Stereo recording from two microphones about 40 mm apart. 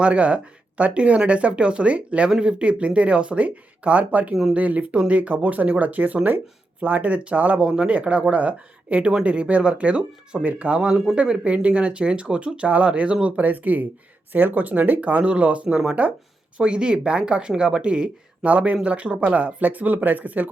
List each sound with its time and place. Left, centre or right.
0.0 s speech: right
7.6 s speech: right
7.9 s speech: right
10.8 s speech: right
18.4 s speech: right